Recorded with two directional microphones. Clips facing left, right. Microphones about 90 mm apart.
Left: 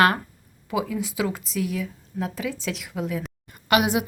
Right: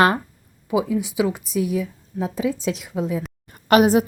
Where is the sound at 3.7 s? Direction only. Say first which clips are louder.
Right 6 dB; 40° right (ahead or behind).